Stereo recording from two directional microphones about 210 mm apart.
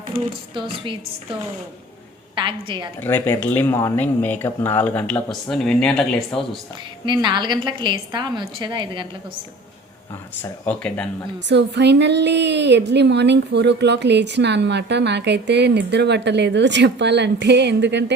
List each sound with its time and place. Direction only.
2.3 s a woman's voice: 25° right (ahead or behind)
3.0 s speech: 10° left (ahead or behind)
7.0 s a woman's voice: 20° right (ahead or behind)
10.4 s speech: 5° left (ahead or behind)
11.4 s speech: 55° right (ahead or behind)